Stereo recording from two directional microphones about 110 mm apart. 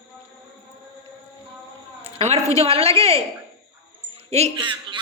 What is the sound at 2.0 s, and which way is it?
Speech, 80° right.